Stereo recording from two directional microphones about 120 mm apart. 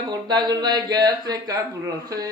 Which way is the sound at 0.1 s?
35° right (ahead or behind).